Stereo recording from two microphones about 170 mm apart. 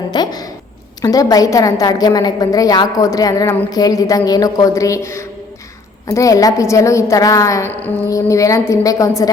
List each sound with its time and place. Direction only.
0.1 s a woman's voice: 25° left (ahead or behind)